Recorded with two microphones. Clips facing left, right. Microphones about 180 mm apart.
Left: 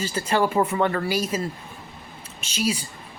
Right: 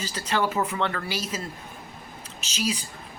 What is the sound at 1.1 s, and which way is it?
Speech, 45° left (ahead or behind).